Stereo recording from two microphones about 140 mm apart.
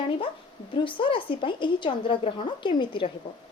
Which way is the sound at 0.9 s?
35° left (ahead or behind).